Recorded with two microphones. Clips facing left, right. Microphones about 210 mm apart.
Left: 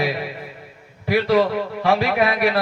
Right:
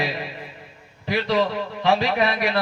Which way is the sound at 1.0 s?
50° left (ahead or behind).